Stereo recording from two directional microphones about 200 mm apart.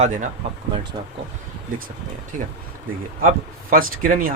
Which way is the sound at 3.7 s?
45° right (ahead or behind).